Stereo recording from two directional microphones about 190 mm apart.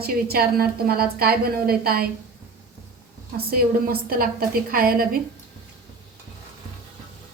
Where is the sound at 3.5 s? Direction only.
50° right (ahead or behind).